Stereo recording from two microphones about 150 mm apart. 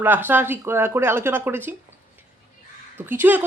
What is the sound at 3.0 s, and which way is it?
Speech, 15° right (ahead or behind).